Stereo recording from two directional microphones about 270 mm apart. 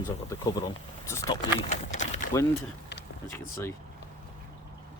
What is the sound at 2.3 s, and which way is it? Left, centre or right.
Speech, centre.